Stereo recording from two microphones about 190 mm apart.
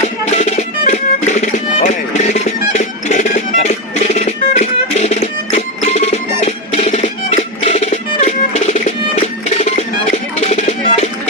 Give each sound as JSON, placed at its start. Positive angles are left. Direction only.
{"t": 0.3, "sound": "music", "side_deg": 35}